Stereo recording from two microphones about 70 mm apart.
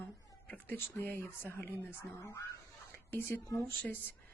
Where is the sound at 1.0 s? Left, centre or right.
Left.